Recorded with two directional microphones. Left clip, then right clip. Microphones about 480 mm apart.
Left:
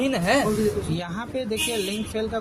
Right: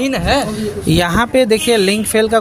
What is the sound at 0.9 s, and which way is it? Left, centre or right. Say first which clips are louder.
Speech: right 17 dB; centre.